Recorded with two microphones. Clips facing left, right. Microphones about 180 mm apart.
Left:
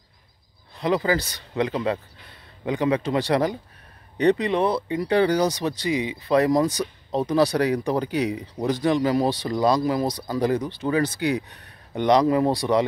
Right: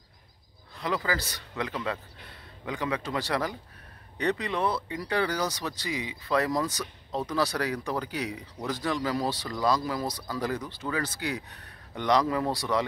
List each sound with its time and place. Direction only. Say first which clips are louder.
0.7 s speech: left 8 dB; 20° left (ahead or behind)